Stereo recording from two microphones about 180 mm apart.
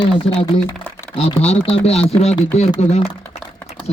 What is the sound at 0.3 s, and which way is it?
Speech, 35° left (ahead or behind).